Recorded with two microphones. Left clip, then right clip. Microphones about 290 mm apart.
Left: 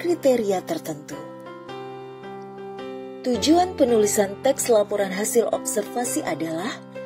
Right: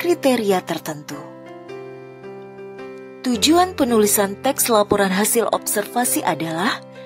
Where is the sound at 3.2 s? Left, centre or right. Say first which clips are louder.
Right 3 dB; right.